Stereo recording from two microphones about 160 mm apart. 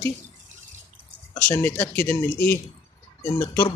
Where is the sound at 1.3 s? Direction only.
15° left (ahead or behind).